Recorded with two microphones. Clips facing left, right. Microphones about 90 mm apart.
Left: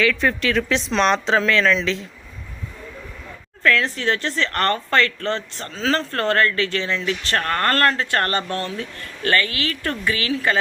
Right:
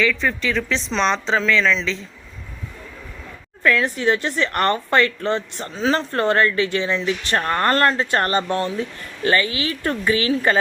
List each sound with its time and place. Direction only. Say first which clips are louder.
0.0 s speech: left 1 dB; centre (ahead or behind)
3.6 s speech: right 1 dB; 15° right (ahead or behind)